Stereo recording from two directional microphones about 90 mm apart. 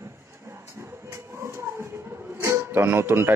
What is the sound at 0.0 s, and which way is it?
Speech, 30° right (ahead or behind).